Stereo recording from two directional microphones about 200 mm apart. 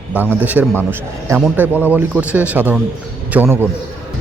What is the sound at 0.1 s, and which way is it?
A man's voice, 10° right (ahead or behind).